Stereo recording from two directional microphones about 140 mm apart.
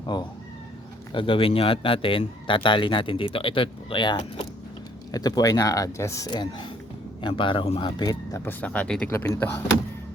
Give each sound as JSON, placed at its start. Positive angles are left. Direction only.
{"t": 0.0, "sound": "speech", "side_deg": 30}
{"t": 7.9, "sound": "speech", "side_deg": 25}
{"t": 8.6, "sound": "speech", "side_deg": 10}
{"t": 9.0, "sound": "speech", "side_deg": 20}